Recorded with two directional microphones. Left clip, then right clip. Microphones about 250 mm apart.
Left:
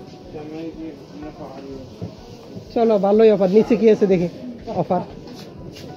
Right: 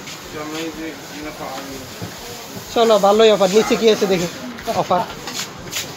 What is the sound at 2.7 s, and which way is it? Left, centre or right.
Speech, centre.